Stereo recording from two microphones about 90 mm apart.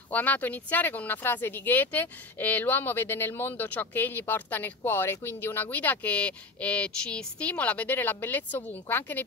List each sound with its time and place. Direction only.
0.1 s speech: 20° left (ahead or behind)